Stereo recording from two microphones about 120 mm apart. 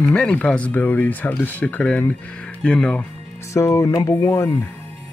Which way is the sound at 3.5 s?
25° left (ahead or behind).